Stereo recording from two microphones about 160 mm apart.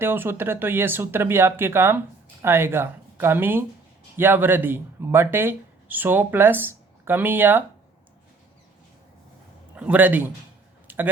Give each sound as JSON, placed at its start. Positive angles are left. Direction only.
{"t": 0.0, "sound": "speech", "side_deg": -15}
{"t": 9.7, "sound": "speech", "side_deg": -10}
{"t": 10.8, "sound": "a sound", "side_deg": -10}